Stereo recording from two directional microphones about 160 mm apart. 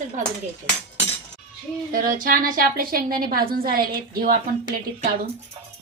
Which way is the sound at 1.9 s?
55° right (ahead or behind).